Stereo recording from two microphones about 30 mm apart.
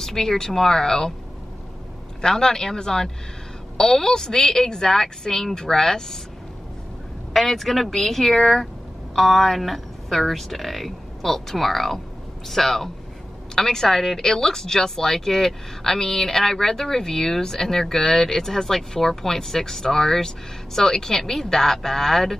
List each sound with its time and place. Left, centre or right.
0.0 s speech: centre
2.2 s a woman's voice: left
7.3 s speech: centre